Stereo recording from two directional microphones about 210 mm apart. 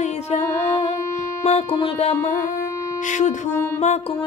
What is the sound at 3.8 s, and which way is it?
Speech, 30° left (ahead or behind).